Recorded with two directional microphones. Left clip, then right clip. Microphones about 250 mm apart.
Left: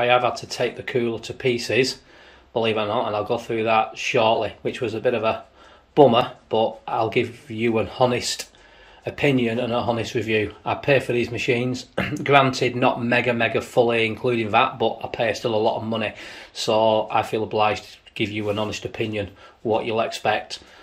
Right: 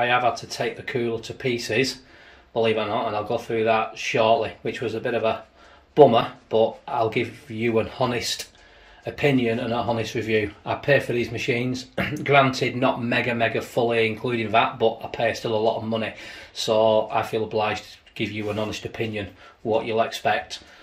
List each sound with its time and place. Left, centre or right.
0.0 s speech: centre